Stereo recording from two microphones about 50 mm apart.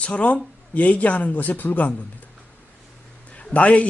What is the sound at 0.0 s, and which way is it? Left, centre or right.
Speech, left.